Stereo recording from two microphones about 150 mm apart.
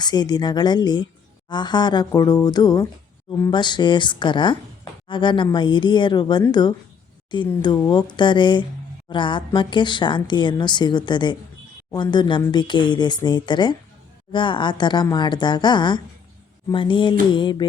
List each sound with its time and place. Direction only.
0.0 s speech: 30° left (ahead or behind)